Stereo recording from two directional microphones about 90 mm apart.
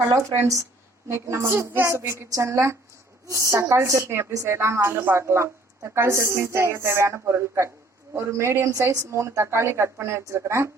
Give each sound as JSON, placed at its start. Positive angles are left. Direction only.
{"t": 0.1, "sound": "a woman's voice", "side_deg": -35}